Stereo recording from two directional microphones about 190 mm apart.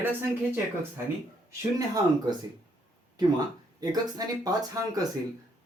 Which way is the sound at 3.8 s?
20° right (ahead or behind).